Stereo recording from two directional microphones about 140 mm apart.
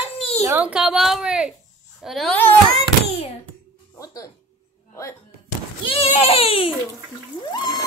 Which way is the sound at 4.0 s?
25° left (ahead or behind).